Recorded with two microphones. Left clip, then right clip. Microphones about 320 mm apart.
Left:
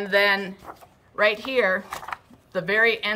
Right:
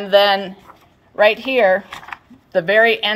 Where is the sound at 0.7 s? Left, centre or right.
Centre.